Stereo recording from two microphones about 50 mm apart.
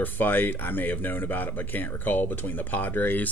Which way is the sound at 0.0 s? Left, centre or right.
Left.